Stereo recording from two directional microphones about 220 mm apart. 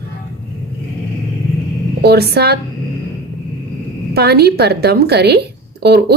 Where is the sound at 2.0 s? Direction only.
45° right (ahead or behind).